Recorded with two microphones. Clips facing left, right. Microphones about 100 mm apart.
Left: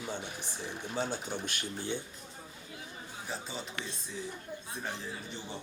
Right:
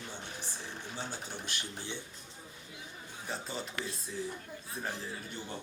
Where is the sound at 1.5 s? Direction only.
50° left (ahead or behind).